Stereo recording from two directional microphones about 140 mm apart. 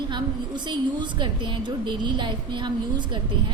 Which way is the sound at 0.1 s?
35° right (ahead or behind).